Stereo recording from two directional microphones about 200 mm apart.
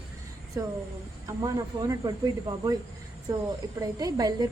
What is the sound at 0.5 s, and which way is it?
Speech, 15° right (ahead or behind).